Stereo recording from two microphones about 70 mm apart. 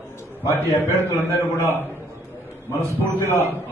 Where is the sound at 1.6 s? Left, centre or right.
Right.